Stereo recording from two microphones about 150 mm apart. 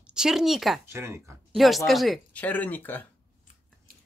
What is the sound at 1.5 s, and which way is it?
Speech, centre (ahead or behind).